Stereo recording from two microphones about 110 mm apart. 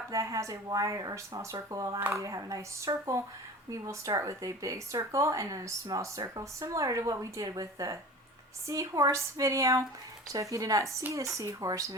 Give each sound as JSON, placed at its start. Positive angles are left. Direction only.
{"t": 0.1, "sound": "speech", "side_deg": -30}